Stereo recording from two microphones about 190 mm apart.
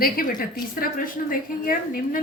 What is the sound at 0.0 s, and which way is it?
A woman's voice, 50° left (ahead or behind).